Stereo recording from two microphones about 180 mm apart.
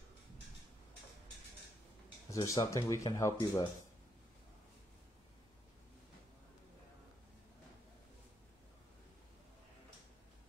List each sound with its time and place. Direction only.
2.3 s speech: 20° left (ahead or behind)